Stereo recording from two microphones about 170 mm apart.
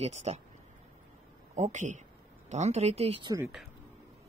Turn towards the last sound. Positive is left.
turn(degrees=-35)  # may be behind; listen again after turning